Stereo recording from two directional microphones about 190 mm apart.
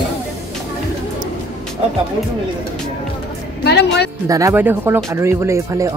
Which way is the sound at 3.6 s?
60° left (ahead or behind).